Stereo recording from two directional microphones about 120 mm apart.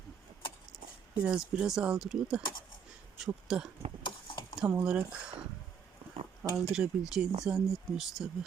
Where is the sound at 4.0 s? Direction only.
45° left (ahead or behind).